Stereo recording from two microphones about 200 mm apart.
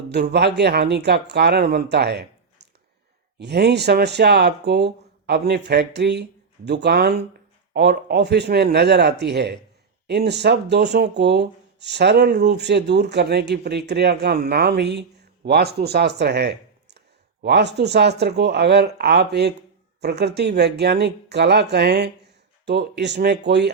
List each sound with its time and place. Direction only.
0.1 s speech: 55° right (ahead or behind)